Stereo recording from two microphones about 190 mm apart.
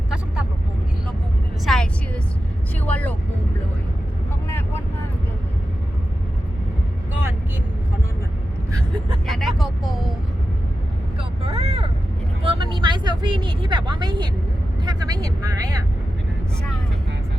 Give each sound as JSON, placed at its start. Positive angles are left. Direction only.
{"t": 1.6, "sound": "vehicle", "side_deg": 0}
{"t": 9.2, "sound": "vehicle", "side_deg": 0}
{"t": 11.2, "sound": "vehicle", "side_deg": -30}